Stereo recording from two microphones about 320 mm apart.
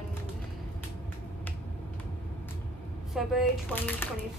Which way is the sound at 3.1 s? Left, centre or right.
Centre.